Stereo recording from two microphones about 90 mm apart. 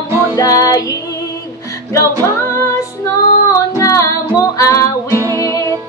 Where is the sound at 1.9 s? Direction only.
35° left (ahead or behind).